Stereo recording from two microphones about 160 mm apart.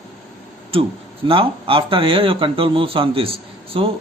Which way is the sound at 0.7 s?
35° right (ahead or behind).